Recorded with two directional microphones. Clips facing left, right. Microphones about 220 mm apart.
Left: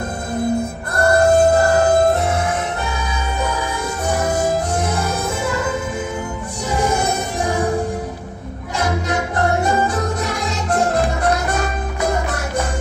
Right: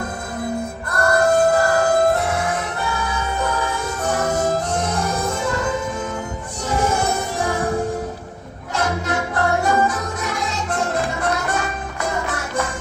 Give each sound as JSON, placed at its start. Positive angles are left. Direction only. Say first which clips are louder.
{"t": 0.9, "sound": "music", "louder": "left 3 dB", "side_deg": 25}
{"t": 3.4, "sound": "music", "louder": "left 1 dB", "side_deg": 10}
{"t": 6.7, "sound": "music", "louder": "left 1 dB", "side_deg": 15}
{"t": 8.8, "sound": "music", "louder": "left 2 dB", "side_deg": 15}